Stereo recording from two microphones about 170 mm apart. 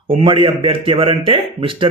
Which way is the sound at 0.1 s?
30° right (ahead or behind).